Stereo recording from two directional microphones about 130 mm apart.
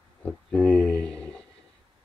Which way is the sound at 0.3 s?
10° left (ahead or behind).